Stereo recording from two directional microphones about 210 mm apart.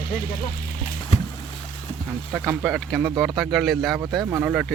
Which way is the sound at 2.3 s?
5° right (ahead or behind).